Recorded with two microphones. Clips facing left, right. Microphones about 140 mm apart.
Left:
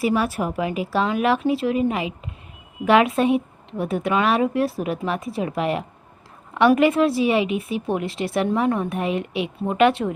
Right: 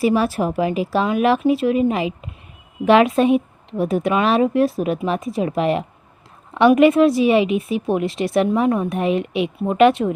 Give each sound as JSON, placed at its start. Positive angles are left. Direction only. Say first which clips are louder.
{"t": 0.0, "sound": "a woman's voice", "louder": "right 4 dB", "side_deg": -25}